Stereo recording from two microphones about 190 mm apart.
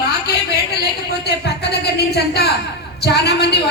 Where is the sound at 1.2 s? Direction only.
60° left (ahead or behind).